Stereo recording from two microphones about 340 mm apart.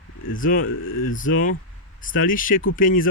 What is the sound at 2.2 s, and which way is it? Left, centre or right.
Speech, left.